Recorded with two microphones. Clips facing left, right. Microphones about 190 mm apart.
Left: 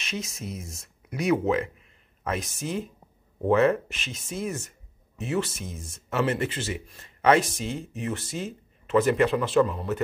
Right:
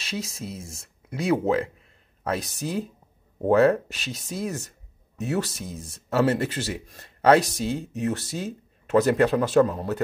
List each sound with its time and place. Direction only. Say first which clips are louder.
0.0 s speech: right 2 dB; 30° right (ahead or behind)